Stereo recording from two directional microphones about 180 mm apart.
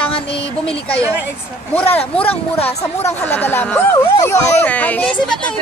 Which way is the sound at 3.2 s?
10° left (ahead or behind).